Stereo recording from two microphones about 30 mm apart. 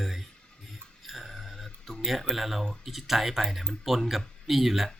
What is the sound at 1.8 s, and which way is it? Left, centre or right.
Speech, centre.